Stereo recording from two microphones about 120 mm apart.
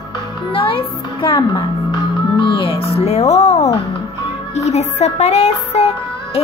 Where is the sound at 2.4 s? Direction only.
45° left (ahead or behind).